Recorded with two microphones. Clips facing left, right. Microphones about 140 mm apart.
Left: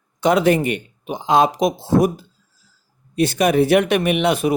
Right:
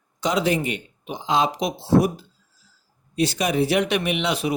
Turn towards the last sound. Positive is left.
turn(degrees=50)  # may be behind; listen again after turning